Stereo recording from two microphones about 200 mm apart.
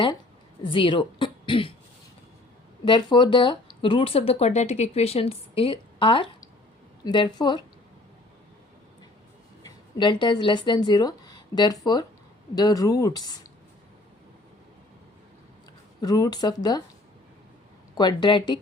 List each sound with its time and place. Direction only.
0.6 s speech: 25° left (ahead or behind)
2.8 s speech: 25° left (ahead or behind)
9.6 s speech: 25° left (ahead or behind)
16.0 s speech: 20° left (ahead or behind)
17.9 s speech: 20° left (ahead or behind)